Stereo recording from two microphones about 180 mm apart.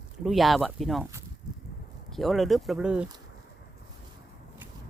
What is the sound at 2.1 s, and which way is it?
Speech, centre (ahead or behind).